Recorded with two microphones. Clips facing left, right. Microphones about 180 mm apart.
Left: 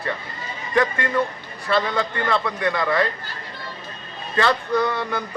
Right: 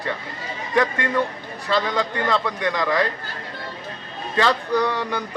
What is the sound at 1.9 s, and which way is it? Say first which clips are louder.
Speech: right 1 dB; 15° right (ahead or behind).